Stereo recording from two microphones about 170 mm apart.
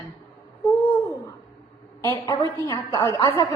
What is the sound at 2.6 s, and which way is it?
Speech, 25° left (ahead or behind).